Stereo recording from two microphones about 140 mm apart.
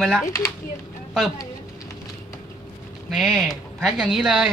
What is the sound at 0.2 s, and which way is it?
Speech, 20° left (ahead or behind).